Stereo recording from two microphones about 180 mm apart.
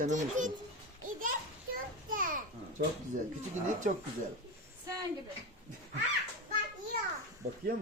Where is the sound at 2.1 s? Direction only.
50° right (ahead or behind).